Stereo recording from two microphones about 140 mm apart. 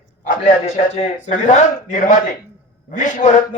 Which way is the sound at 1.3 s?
60° left (ahead or behind).